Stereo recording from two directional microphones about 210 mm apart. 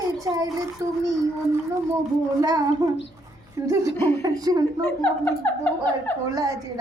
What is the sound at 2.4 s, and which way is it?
Speech, 15° right (ahead or behind).